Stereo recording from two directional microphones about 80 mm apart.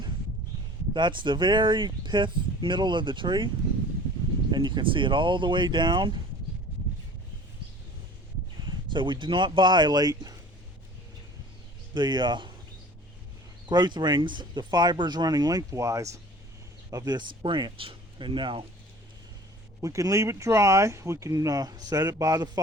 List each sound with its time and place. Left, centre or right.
0.9 s speech: right
4.5 s speech: right
8.9 s speech: right
11.9 s speech: right
13.7 s speech: right
16.9 s speech: right
19.8 s speech: right